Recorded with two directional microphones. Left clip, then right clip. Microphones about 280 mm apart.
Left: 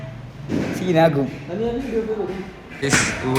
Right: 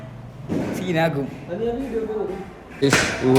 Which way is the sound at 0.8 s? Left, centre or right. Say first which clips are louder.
Left 6 dB; centre.